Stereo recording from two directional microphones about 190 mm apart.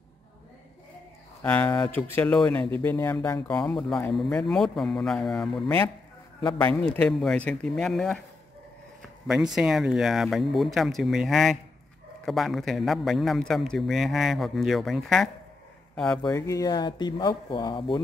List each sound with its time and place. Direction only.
1.4 s a man's voice: 10° left (ahead or behind)
9.3 s a man's voice: centre (ahead or behind)
16.3 s speech: 20° left (ahead or behind)